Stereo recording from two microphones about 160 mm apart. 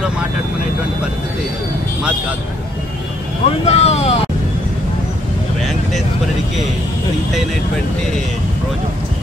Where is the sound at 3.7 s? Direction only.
40° left (ahead or behind).